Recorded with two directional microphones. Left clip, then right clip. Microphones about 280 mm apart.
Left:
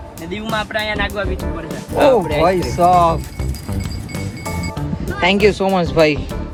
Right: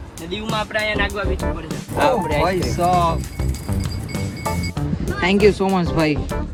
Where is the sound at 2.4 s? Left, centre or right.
Centre.